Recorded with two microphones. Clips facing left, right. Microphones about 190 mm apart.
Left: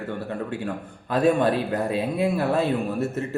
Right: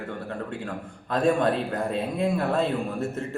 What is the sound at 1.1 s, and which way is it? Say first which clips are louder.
A man's voice: left 2 dB; 5° left (ahead or behind).